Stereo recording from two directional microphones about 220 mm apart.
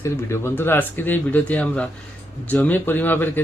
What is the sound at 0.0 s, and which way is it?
Speech, 10° left (ahead or behind).